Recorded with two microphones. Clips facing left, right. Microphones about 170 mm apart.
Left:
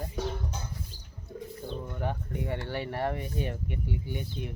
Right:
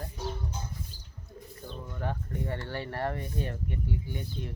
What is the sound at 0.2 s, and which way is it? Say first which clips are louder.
Music: left 4 dB; 80° left.